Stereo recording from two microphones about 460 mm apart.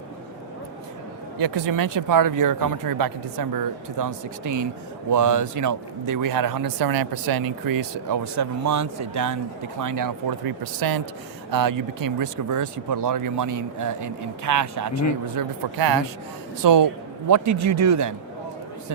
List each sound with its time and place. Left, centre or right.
1.4 s speech: right
15.4 s speech: right